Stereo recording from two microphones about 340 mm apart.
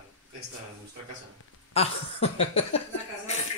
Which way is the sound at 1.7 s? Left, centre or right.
Centre.